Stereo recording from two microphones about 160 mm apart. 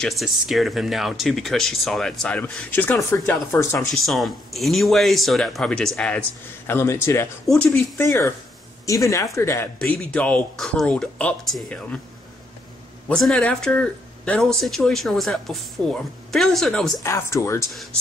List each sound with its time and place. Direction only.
0.0 s speech: centre (ahead or behind)
3.9 s speech: centre (ahead or behind)
8.0 s speech: 20° left (ahead or behind); by 12.0 s 5° left (ahead or behind)
13.1 s speech: 5° left (ahead or behind)
17.0 s speech: 15° left (ahead or behind)